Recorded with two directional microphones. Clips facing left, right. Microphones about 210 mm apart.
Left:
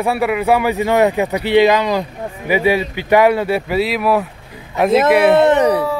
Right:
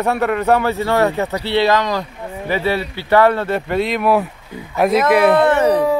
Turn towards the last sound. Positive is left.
turn(degrees=15)  # may be behind; listen again after turning